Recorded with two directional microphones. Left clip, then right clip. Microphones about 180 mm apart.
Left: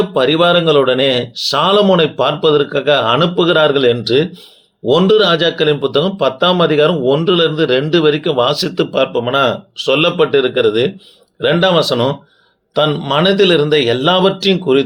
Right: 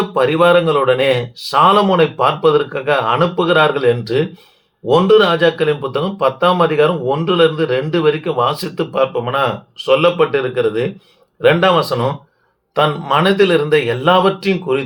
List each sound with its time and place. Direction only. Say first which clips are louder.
0.1 s speech: right 2 dB; 45° left (ahead or behind)